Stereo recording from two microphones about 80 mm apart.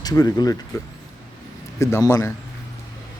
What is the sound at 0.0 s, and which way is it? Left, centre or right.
Speech, left.